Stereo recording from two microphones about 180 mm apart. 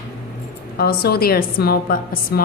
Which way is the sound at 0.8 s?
60° left (ahead or behind).